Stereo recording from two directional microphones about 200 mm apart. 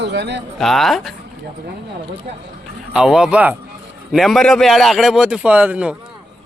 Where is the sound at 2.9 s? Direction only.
5° right (ahead or behind).